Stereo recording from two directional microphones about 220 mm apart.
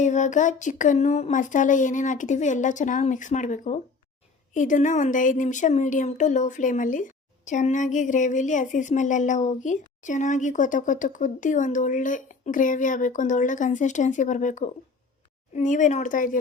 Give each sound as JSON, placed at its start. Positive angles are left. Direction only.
{"t": 0.0, "sound": "speech", "side_deg": 35}